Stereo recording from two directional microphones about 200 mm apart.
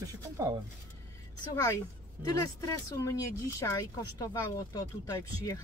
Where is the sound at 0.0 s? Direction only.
15° right (ahead or behind).